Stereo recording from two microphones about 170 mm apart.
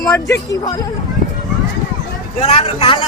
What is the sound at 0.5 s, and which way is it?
Speech, 20° left (ahead or behind).